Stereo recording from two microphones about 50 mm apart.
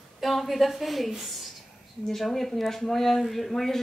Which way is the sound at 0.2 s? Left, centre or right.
Centre.